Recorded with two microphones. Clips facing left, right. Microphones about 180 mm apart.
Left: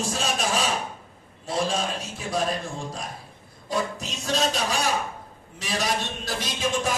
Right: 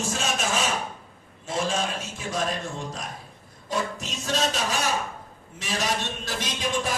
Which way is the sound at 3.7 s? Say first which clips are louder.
Left 1 dB; 35° left (ahead or behind).